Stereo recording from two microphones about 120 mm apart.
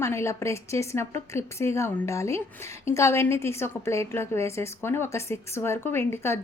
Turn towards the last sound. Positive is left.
turn(degrees=20)  # may be behind; listen again after turning